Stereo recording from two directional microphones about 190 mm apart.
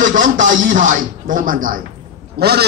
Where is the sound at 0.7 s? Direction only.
45° right (ahead or behind).